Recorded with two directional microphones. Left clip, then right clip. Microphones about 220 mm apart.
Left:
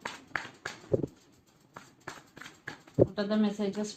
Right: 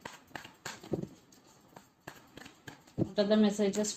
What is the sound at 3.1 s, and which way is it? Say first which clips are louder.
Speech: right 3 dB; 40° right (ahead or behind).